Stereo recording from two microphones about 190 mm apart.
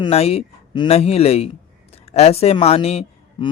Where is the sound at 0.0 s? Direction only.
30° left (ahead or behind).